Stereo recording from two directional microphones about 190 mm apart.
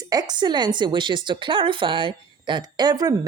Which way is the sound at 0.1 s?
20° right (ahead or behind).